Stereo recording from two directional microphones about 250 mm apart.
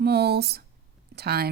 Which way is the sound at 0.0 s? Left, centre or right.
Right.